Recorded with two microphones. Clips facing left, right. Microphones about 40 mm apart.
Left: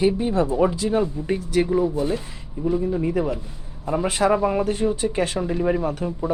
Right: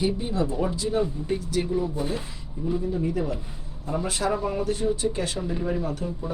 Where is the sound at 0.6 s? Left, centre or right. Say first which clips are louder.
Left 5 dB; left.